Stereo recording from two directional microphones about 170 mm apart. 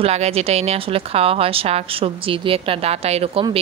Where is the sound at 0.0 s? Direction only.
35° right (ahead or behind).